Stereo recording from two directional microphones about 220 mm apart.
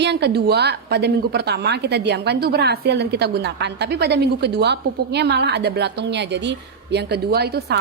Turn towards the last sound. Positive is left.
turn(degrees=-45)  # may be behind; listen again after turning